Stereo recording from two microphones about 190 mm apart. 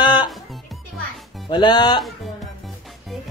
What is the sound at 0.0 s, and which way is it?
Music, 25° left (ahead or behind).